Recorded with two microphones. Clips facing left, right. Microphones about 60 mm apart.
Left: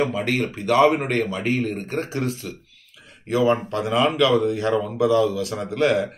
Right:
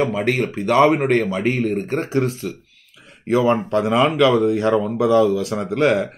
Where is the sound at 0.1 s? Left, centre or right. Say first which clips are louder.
Right 3 dB; right.